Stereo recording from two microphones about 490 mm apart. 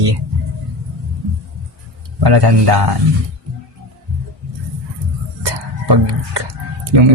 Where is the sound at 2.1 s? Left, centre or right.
Right.